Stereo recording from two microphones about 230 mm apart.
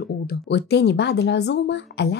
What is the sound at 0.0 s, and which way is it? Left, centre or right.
Speech, left.